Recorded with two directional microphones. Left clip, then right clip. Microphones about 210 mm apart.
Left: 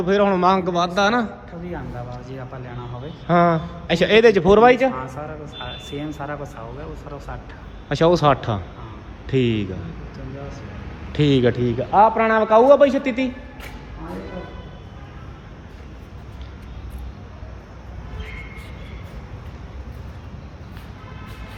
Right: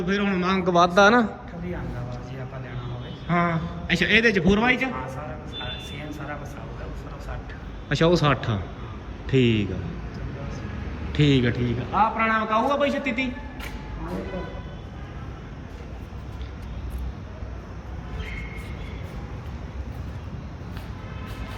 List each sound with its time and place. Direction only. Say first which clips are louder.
0.0 s a man's voice: left 9 dB; 15° left (ahead or behind)
0.6 s a man's voice: right 2 dB; centre (ahead or behind)
3.8 s a man's voice: left 6 dB; 20° left (ahead or behind)
7.9 s a man's voice: left 5 dB; 10° left (ahead or behind)
11.1 s a man's voice: left 4 dB; 10° left (ahead or behind); by 13.3 s 25° left (ahead or behind)